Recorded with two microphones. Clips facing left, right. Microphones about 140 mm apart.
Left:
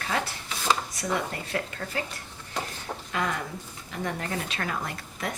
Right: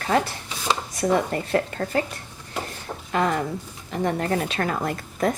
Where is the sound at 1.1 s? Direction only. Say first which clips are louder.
Right 7 dB; 40° right (ahead or behind).